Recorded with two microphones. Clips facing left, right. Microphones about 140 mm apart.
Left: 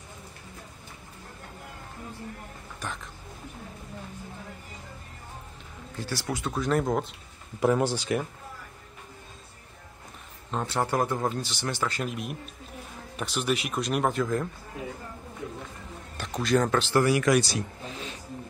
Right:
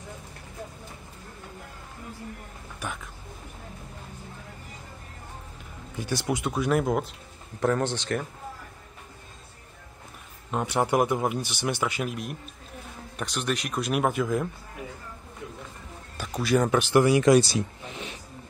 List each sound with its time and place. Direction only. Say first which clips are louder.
2.8 s a sound: right 1 dB; 10° right (ahead or behind)
5.9 s a man's voice: right 4 dB; 15° right (ahead or behind)
7.6 s speech: left 1 dB; 10° left (ahead or behind)
10.5 s a man's voice: right 3 dB; 15° right (ahead or behind)
12.1 s speech: even; centre (ahead or behind)
16.2 s speech: right 1 dB; 5° right (ahead or behind); by 18.1 s 25° right (ahead or behind)